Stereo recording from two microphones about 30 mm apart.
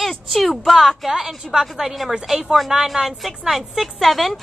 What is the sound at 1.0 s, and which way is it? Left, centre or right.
Speech, centre.